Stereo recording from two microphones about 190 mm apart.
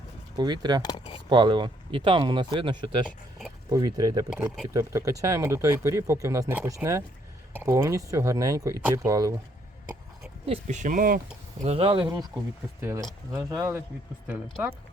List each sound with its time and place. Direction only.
0.3 s speech: 20° right (ahead or behind)
0.8 s speech: 20° left (ahead or behind)
1.3 s speech: 25° right (ahead or behind)
4.3 s speech: 5° right (ahead or behind)
4.7 s speech: 15° right (ahead or behind)
10.4 s speech: 35° right (ahead or behind)
11.6 s speech: 30° right (ahead or behind)
12.8 s speech: 15° right (ahead or behind)